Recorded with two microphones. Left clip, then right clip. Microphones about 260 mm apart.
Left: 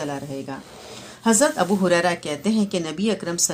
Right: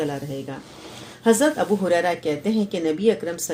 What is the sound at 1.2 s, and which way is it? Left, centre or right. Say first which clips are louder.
Speech: right 1 dB; left.